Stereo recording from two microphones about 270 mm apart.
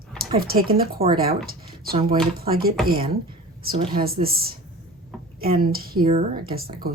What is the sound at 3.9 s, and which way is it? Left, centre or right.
A woman's voice, right.